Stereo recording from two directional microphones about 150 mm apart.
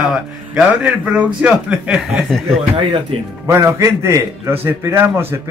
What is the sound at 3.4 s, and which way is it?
A man's voice, 20° right (ahead or behind).